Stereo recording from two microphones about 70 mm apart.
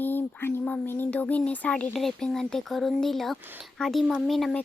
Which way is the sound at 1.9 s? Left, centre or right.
Centre.